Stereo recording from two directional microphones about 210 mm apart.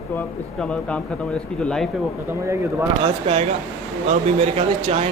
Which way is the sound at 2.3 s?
15° right (ahead or behind).